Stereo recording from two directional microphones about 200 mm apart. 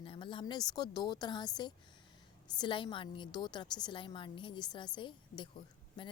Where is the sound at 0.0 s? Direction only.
25° left (ahead or behind).